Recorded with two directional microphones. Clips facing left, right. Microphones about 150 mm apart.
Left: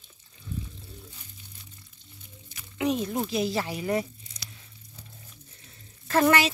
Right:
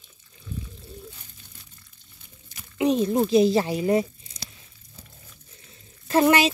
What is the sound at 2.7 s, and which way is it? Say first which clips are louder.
Speech: right 6 dB; 25° right (ahead or behind).